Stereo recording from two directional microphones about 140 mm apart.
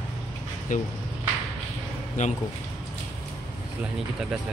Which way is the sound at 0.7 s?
65° left (ahead or behind).